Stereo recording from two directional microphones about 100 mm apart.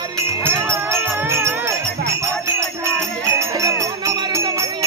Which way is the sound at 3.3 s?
30° right (ahead or behind).